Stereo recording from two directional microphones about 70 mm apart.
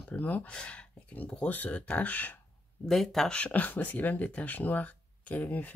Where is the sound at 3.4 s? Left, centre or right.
Left.